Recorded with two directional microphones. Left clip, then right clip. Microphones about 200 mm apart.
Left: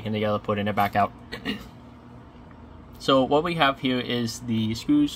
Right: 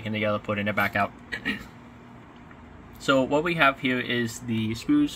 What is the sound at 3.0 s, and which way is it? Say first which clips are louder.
Speech: left 2 dB; 5° left (ahead or behind).